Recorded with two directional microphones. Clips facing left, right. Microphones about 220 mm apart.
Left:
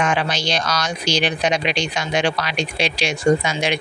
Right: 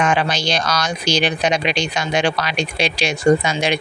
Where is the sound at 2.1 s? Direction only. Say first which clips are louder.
Right 1 dB; 40° right (ahead or behind).